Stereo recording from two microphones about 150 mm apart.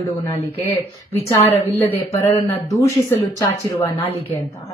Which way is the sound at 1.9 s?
20° left (ahead or behind).